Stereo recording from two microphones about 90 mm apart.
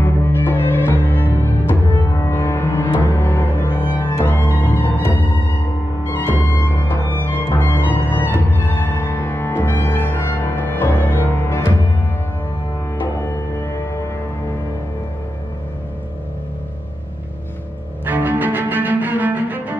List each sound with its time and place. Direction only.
0.0 s music: 25° left (ahead or behind)
2.1 s cello: 25° left (ahead or behind)
6.0 s music: 25° left (ahead or behind)
13.0 s music: 25° left (ahead or behind)
18.0 s cello: 20° right (ahead or behind)